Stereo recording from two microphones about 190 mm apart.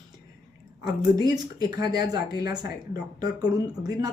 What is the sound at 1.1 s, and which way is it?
Speech, 20° right (ahead or behind).